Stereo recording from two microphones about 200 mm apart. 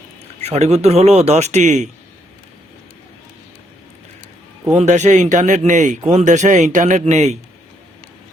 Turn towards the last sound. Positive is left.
turn(degrees=-35)  # may be behind; listen again after turning